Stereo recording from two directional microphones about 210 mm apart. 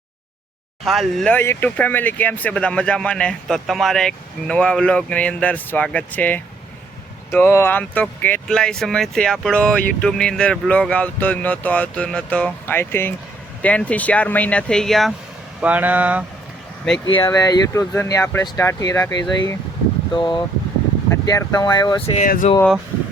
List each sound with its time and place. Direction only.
0.9 s speech: centre (ahead or behind)
17.1 s speech: 20° left (ahead or behind)
22.3 s speech: 40° left (ahead or behind)